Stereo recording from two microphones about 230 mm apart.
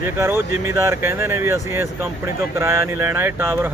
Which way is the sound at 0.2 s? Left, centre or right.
Centre.